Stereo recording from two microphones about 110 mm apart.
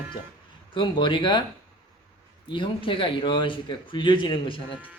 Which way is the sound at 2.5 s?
50° left (ahead or behind).